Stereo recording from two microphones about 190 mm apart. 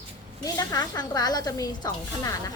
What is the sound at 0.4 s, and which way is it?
Speech, 20° left (ahead or behind).